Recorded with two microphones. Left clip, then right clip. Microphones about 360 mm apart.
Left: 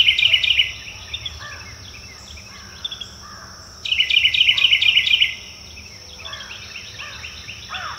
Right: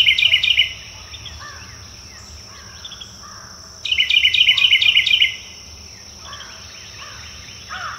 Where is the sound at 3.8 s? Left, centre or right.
Right.